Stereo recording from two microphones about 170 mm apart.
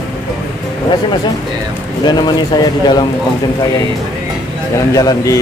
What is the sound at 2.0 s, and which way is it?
Speech, 25° left (ahead or behind).